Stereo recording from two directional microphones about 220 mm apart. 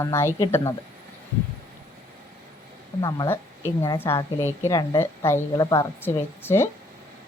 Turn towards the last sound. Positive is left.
turn(degrees=10)  # may be behind; listen again after turning